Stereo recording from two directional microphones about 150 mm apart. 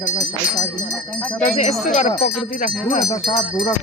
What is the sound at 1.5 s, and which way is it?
Speech, 50° left (ahead or behind).